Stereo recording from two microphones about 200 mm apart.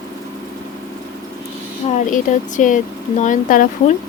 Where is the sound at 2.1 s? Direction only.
40° left (ahead or behind).